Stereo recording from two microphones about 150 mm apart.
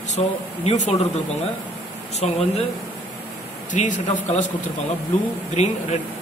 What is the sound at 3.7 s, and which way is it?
Speech, 55° left (ahead or behind).